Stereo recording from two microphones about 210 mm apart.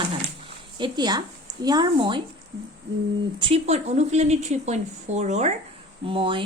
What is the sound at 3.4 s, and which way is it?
A woman's voice, 25° right (ahead or behind).